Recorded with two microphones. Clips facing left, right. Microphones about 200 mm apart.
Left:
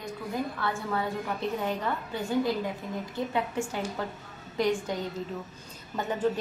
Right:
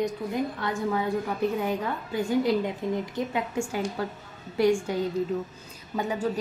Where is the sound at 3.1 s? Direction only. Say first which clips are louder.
Right 1 dB; 15° right (ahead or behind).